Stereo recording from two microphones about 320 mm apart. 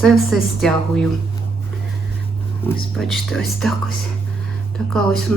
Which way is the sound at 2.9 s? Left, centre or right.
Centre.